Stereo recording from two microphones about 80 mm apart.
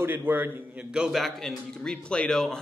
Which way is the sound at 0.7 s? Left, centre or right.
Centre.